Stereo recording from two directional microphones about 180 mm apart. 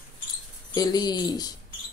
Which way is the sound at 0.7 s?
25° left (ahead or behind).